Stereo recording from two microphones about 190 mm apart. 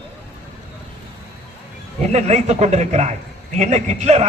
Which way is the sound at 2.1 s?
35° right (ahead or behind).